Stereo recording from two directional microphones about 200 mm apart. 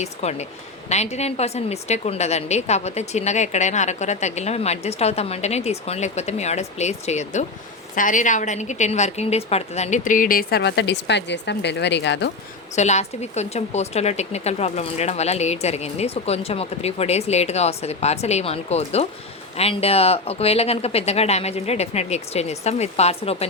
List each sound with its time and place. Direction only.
0.0 s a woman's voice: 35° left (ahead or behind); by 12.3 s 60° left (ahead or behind)
12.7 s a woman's voice: 35° left (ahead or behind)